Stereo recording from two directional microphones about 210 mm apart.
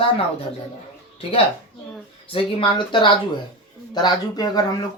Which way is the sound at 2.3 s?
25° left (ahead or behind).